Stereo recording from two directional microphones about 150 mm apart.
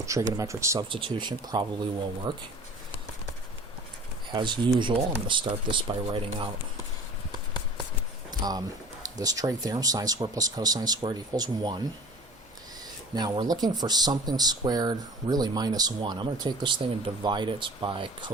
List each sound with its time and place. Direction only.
0.0 s speech: 20° right (ahead or behind)
0.9 s speech: 35° right (ahead or behind)
4.3 s speech: 30° right (ahead or behind)
8.3 s a sound: 25° right (ahead or behind)
9.0 s speech: 25° right (ahead or behind)
13.1 s speech: 30° right (ahead or behind)